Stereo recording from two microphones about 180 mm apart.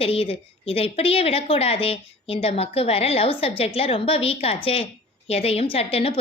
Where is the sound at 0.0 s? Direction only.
30° left (ahead or behind).